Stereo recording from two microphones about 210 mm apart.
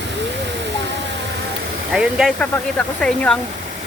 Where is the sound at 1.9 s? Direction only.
5° right (ahead or behind).